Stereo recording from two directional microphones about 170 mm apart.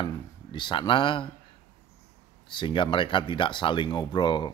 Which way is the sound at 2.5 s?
30° left (ahead or behind).